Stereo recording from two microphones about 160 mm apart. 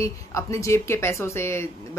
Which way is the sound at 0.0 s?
20° left (ahead or behind).